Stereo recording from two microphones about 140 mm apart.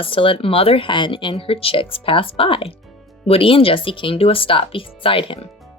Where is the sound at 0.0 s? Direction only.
40° left (ahead or behind).